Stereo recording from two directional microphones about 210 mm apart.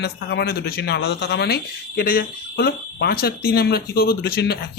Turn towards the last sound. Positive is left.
turn(degrees=50)  # may be behind; listen again after turning